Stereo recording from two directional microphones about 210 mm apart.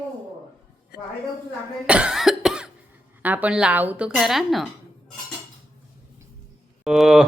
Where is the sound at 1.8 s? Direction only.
5° right (ahead or behind).